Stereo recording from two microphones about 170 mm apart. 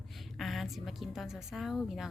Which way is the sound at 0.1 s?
Centre (ahead or behind).